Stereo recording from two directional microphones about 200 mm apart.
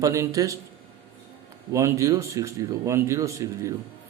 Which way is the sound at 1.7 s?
15° right (ahead or behind).